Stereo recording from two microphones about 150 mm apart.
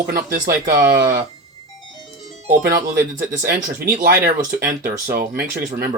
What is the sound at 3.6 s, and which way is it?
Speech, 70° right (ahead or behind).